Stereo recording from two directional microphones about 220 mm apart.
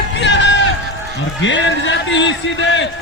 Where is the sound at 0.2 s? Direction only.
55° left (ahead or behind).